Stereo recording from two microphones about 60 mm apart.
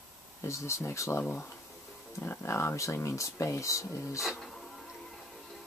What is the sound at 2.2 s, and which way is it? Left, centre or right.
Speech, left.